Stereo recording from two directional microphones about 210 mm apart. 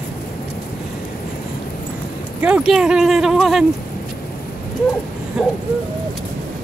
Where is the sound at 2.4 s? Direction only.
5° right (ahead or behind).